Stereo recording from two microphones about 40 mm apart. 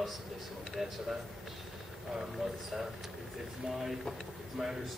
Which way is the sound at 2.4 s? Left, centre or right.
Centre.